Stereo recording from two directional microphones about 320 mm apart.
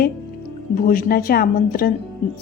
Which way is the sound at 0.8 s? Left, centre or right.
Left.